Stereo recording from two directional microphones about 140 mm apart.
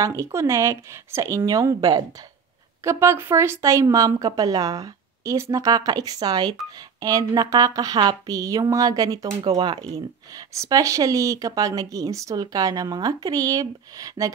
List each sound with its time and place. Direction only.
0.0 s speech: 20° right (ahead or behind)